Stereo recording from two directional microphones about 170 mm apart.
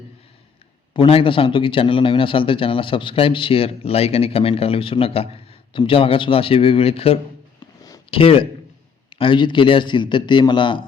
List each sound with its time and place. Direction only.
0.9 s a man's voice: 35° left (ahead or behind)